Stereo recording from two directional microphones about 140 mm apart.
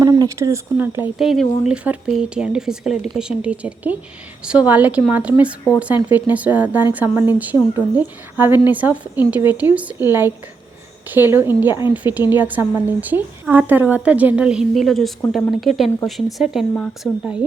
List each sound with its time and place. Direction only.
0.0 s speech: 20° right (ahead or behind)
1.2 s a woman's voice: centre (ahead or behind)